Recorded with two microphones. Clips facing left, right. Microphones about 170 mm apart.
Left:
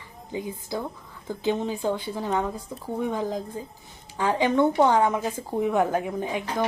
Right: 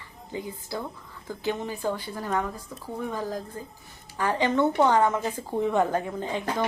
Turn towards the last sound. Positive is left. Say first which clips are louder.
# left 1 dB
turn(degrees=10)  # may be behind; listen again after turning